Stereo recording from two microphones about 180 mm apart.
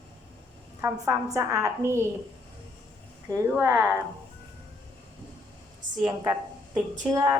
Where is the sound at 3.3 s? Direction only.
15° right (ahead or behind).